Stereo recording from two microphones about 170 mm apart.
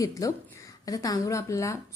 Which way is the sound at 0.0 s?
20° left (ahead or behind).